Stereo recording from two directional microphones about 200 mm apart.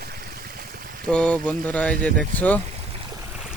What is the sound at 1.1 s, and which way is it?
Speech, 5° left (ahead or behind).